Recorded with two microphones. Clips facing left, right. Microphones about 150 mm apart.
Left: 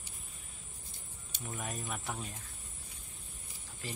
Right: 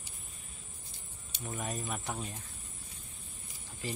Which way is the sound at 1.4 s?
Centre (ahead or behind).